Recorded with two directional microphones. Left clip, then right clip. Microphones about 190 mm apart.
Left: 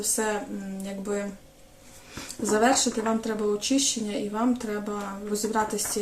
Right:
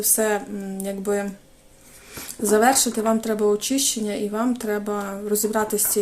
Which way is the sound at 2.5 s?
45° right (ahead or behind).